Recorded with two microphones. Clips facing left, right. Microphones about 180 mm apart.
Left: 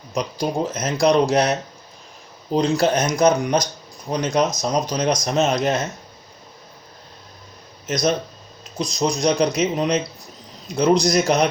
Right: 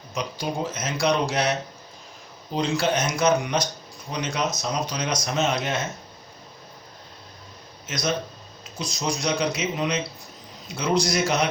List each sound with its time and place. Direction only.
0.1 s speech: 40° left (ahead or behind)
2.6 s speech: 40° left (ahead or behind)
7.9 s speech: 40° left (ahead or behind)